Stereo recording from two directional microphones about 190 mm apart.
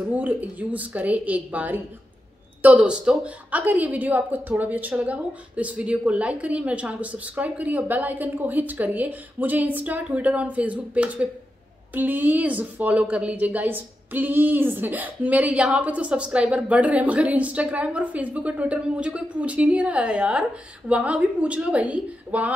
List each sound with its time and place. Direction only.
0.1 s a woman's voice: 10° right (ahead or behind)